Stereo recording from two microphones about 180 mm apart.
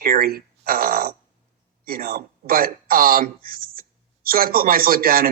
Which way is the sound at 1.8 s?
55° right (ahead or behind).